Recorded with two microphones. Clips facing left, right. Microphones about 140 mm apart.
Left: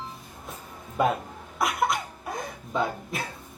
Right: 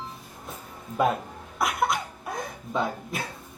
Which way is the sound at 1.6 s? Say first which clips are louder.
Even; centre (ahead or behind).